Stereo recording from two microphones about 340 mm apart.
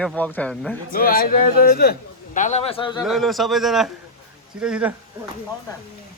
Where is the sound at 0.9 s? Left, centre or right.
Left.